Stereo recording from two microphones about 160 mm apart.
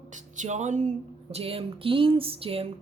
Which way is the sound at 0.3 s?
45° right (ahead or behind).